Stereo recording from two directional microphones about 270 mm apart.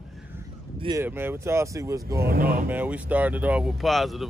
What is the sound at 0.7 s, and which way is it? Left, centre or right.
Speech, centre.